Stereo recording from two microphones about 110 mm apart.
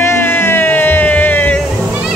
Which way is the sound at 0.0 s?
20° left (ahead or behind).